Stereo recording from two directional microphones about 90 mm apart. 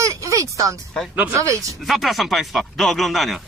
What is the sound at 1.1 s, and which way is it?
Speech, 15° right (ahead or behind).